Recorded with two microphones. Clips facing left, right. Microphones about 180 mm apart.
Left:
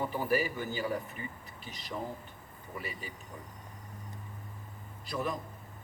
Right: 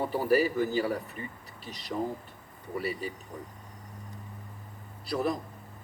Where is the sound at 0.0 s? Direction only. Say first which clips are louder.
Right 5 dB; 35° right (ahead or behind).